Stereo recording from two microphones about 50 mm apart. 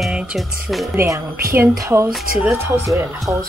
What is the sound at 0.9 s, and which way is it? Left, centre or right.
A woman's voice, right.